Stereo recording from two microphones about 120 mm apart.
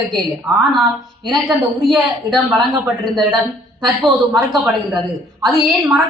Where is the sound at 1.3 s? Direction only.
5° right (ahead or behind).